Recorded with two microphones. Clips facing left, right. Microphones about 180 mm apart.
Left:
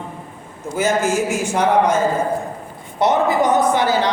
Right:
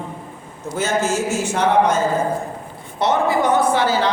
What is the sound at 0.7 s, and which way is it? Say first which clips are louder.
A woman's voice: left 2 dB; 15° left (ahead or behind).